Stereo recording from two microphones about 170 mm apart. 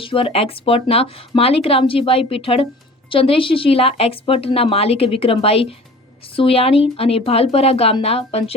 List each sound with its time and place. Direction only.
0.0 s a woman's voice: 30° left (ahead or behind)